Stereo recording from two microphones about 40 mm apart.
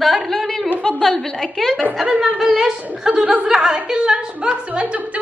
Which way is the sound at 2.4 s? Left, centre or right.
Centre.